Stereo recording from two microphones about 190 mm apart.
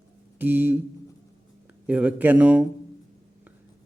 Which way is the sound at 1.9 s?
5° right (ahead or behind).